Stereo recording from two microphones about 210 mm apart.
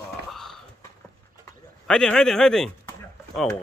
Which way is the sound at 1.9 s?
5° left (ahead or behind).